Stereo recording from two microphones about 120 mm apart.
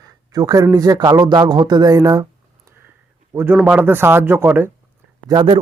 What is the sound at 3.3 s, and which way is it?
A man's voice, 20° right (ahead or behind).